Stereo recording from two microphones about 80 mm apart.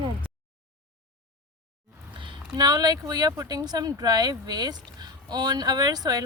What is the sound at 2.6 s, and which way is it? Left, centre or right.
Speech, right.